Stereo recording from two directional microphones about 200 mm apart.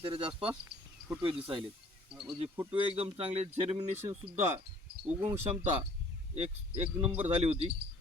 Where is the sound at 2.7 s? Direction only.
30° right (ahead or behind).